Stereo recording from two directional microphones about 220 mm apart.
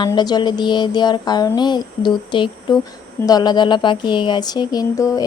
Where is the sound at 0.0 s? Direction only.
20° left (ahead or behind).